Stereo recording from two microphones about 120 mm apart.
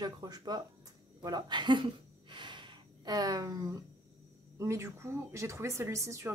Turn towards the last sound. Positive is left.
turn(degrees=-25)  # may be behind; listen again after turning